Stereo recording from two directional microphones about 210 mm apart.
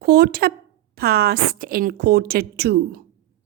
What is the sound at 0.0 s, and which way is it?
Speech, 50° right (ahead or behind).